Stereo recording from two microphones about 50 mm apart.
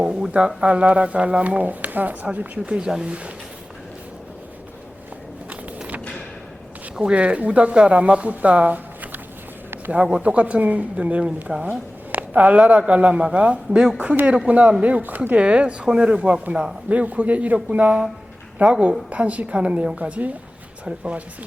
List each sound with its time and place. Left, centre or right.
0.0 s speech: centre
2.6 s speech: centre
6.9 s speech: right
10.2 s speech: right
16.9 s speech: right